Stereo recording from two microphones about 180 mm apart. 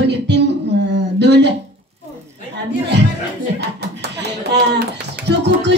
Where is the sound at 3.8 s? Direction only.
65° right (ahead or behind).